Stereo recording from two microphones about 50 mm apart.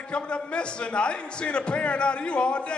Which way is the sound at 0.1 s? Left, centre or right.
Left.